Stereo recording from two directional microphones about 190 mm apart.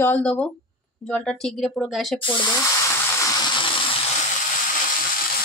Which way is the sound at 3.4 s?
25° left (ahead or behind).